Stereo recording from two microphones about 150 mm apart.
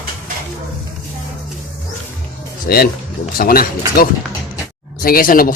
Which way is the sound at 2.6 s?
90° left.